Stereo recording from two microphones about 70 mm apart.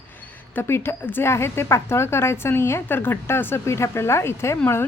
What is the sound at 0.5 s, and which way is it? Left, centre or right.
A woman's voice, left.